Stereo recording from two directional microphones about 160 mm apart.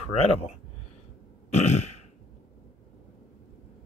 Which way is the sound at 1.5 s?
45° left (ahead or behind).